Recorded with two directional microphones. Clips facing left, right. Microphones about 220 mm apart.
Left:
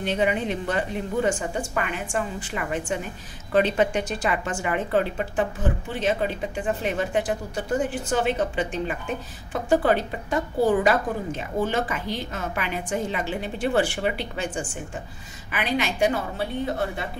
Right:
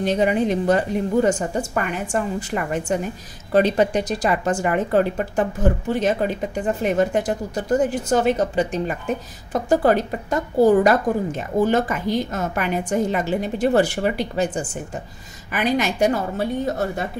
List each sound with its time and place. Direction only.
0.0 s a woman's voice: 40° right (ahead or behind)